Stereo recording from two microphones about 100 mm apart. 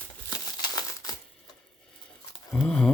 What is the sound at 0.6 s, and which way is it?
Crushing, 40° left (ahead or behind).